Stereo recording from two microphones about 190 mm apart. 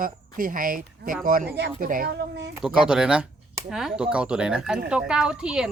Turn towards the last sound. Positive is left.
turn(degrees=-5)  # may be behind; listen again after turning